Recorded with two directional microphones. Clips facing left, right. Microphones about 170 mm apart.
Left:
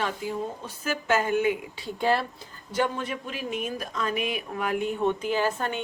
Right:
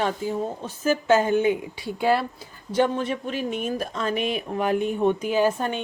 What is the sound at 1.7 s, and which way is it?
Speech, 10° right (ahead or behind).